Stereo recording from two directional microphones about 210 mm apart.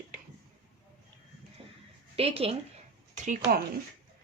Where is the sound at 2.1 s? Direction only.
30° right (ahead or behind).